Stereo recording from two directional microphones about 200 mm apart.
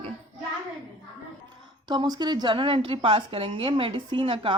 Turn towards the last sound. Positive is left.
turn(degrees=-25)  # may be behind; listen again after turning